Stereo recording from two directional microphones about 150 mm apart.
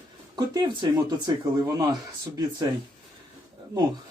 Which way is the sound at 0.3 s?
25° right (ahead or behind).